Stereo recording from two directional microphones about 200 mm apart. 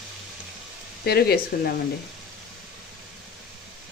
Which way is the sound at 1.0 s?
50° left (ahead or behind).